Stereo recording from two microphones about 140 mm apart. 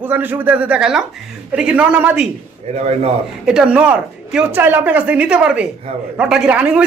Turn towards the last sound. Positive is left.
turn(degrees=-10)  # may be behind; listen again after turning